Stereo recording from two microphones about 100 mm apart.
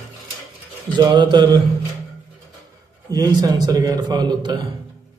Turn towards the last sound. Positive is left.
turn(degrees=-50)  # may be behind; listen again after turning